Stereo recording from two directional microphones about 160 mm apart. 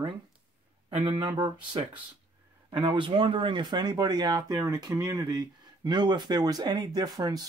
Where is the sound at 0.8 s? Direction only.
30° right (ahead or behind).